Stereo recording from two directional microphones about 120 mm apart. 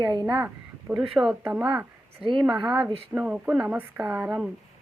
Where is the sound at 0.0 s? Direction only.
35° right (ahead or behind).